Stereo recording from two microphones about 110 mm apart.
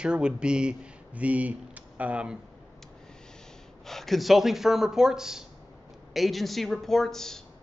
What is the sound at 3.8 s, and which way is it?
Speech, centre (ahead or behind).